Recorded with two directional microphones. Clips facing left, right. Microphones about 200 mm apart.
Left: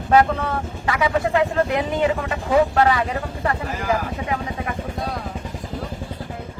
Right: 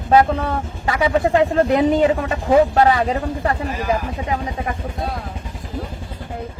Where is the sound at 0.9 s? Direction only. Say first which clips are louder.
Right 3 dB; 30° right (ahead or behind).